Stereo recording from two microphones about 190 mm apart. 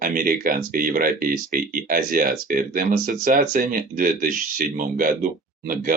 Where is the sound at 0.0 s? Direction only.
45° right (ahead or behind).